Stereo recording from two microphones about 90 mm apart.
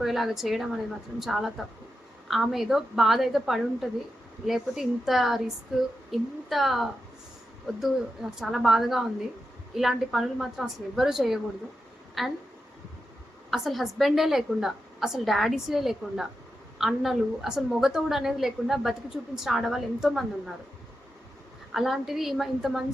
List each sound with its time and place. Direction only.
0.0 s a woman's voice: 5° right (ahead or behind)
13.5 s a woman's voice: centre (ahead or behind)
21.7 s a woman's voice: centre (ahead or behind)